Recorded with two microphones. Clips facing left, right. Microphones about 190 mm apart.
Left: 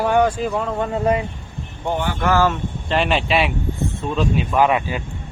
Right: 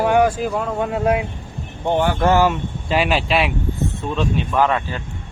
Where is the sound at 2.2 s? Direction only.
20° right (ahead or behind).